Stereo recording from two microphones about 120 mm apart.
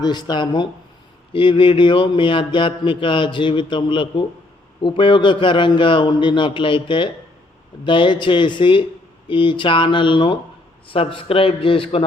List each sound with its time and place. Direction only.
0.0 s speech: 35° left (ahead or behind)